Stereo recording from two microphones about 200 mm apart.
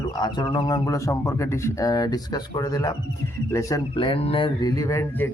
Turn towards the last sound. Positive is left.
turn(degrees=10)  # may be behind; listen again after turning